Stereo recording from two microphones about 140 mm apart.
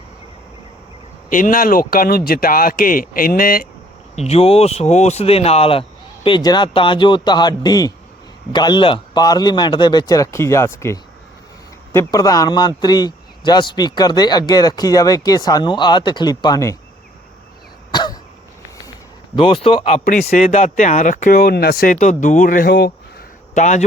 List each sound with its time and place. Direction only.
1.3 s a man's voice: 80° left
4.1 s speech: 50° left (ahead or behind)
6.2 s speech: 30° left (ahead or behind)
12.1 s speech: 25° left (ahead or behind)
17.9 s cough: 30° left (ahead or behind)
19.4 s speech: 40° left (ahead or behind)
20.1 s speech: 65° left (ahead or behind); by 22.7 s 85° left
23.6 s a man's voice: 60° left (ahead or behind)